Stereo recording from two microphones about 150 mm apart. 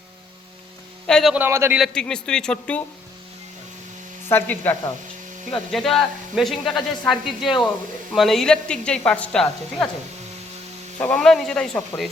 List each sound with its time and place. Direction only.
1.0 s speech: centre (ahead or behind)
1.4 s speech: 15° right (ahead or behind)
1.8 s speech: 5° left (ahead or behind)
4.3 s speech: 15° left (ahead or behind)
5.5 s speech: centre (ahead or behind)
11.0 s speech: 5° left (ahead or behind)